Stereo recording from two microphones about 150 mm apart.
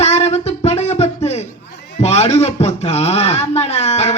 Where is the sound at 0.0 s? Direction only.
45° left (ahead or behind).